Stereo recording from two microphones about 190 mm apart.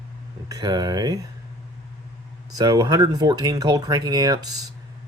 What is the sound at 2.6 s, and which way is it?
Speech, 20° right (ahead or behind).